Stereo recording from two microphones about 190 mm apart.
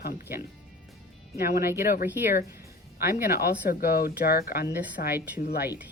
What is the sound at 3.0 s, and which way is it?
Speech, 55° left (ahead or behind).